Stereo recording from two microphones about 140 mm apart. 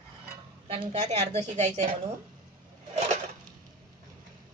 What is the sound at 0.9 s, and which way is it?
A woman's voice, 60° right (ahead or behind).